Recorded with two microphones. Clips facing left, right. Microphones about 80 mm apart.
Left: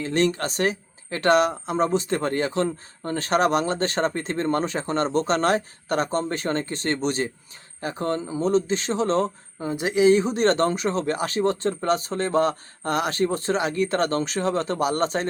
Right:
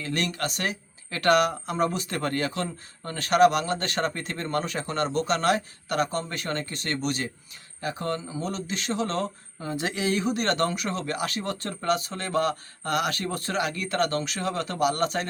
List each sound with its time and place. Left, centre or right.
0.0 s speech: left